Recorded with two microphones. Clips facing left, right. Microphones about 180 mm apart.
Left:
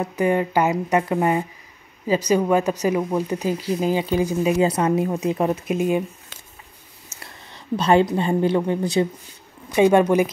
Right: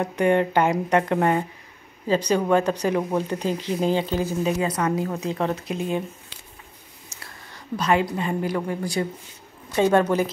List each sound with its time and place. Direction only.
0.0 s speech: 5° left (ahead or behind)
4.6 s speech: 25° left (ahead or behind)
7.2 s a woman's voice: 25° left (ahead or behind)